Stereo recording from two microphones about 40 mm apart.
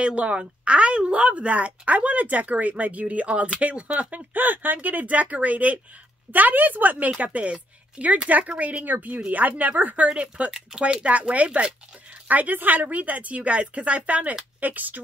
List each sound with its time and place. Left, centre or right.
0.0 s a woman's voice: right
4.3 s a woman's voice: right
8.8 s speech: right
10.0 s a woman's voice: right
12.3 s a woman's voice: right